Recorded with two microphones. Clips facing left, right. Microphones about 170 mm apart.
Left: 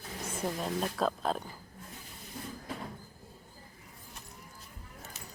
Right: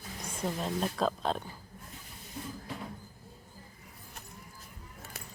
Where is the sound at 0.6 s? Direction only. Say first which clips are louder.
Right 1 dB; centre (ahead or behind).